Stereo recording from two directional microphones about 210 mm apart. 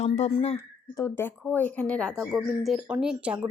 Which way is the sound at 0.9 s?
10° left (ahead or behind).